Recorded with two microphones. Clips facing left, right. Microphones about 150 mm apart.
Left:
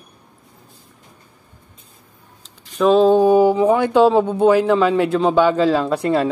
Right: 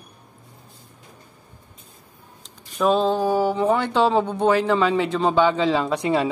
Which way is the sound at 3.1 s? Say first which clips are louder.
Left 8 dB; 15° left (ahead or behind).